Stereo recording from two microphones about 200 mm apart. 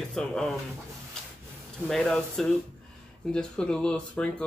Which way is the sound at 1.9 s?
Centre (ahead or behind).